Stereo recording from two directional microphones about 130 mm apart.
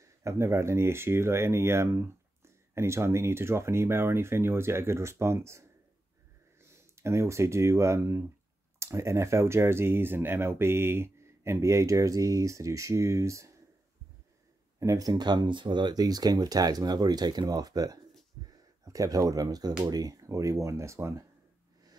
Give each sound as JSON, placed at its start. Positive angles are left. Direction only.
{"t": 0.0, "sound": "speech", "side_deg": -20}
{"t": 7.0, "sound": "speech", "side_deg": -20}
{"t": 14.8, "sound": "speech", "side_deg": -25}